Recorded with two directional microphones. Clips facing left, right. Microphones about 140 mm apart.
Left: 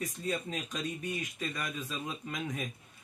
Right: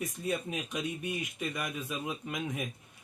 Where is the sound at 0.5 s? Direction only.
20° right (ahead or behind).